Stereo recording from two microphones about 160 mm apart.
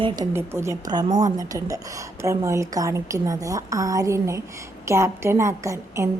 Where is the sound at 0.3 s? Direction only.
15° right (ahead or behind).